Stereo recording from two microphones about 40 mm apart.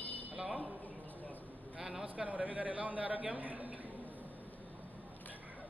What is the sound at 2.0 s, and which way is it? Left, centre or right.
A man's voice, right.